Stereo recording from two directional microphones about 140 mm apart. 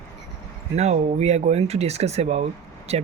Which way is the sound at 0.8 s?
55° right (ahead or behind).